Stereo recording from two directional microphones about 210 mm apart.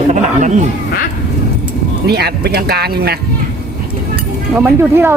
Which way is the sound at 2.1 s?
50° right (ahead or behind).